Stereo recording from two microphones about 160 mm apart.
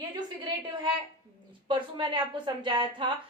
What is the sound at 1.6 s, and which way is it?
Speech, 30° right (ahead or behind).